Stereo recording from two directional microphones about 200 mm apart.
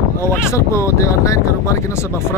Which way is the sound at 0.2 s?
15° left (ahead or behind).